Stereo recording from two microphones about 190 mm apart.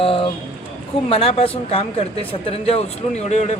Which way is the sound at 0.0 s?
30° left (ahead or behind).